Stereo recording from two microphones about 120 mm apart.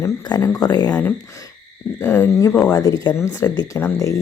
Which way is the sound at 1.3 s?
30° left (ahead or behind).